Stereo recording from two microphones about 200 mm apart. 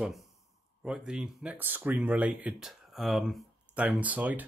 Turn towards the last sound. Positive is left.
turn(degrees=-10)  # may be behind; listen again after turning